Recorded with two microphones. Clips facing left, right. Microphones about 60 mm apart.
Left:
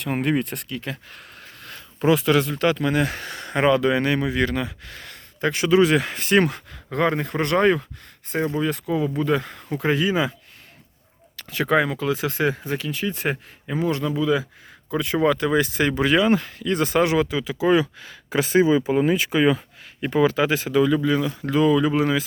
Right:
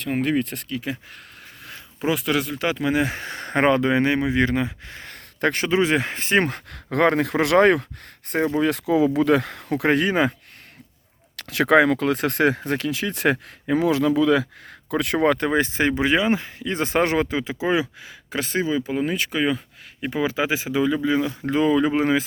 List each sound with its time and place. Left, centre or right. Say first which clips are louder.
0.0 s speech: even; centre
2.0 s speech: left 4 dB; centre; by 5.1 s right
5.1 s a sound: right 2 dB; right
5.6 s speech: left 5 dB; right
6.7 s speech: right 3 dB; right
8.3 s speech: right 2 dB; right
8.6 s speech: right 4 dB; right
9.1 s speech: right 4 dB; right
11.3 s speech: right 4 dB; right; by 18.1 s centre
18.3 s speech: left 6 dB; centre; by 22.2 s right